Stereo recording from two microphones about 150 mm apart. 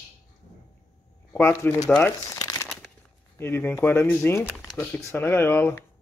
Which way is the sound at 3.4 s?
15° left (ahead or behind).